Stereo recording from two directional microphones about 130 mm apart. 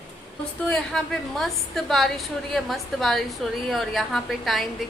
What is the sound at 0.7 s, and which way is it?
A woman's voice, 5° left (ahead or behind).